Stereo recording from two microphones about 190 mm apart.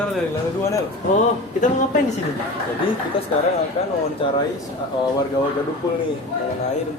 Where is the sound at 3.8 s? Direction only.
30° left (ahead or behind).